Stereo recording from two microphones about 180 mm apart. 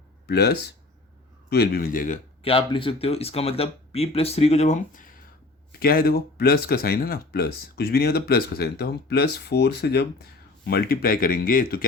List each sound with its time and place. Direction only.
0.3 s speech: 60° left (ahead or behind)
2.4 s speech: 30° left (ahead or behind); by 11.9 s 55° left (ahead or behind)